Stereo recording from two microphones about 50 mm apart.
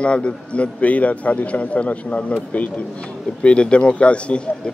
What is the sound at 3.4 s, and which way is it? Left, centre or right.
Speech, left.